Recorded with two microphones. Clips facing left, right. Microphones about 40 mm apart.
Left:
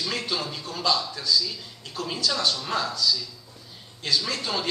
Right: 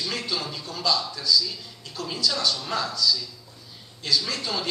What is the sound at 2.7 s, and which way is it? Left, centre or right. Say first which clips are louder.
Speech: left 1 dB; left.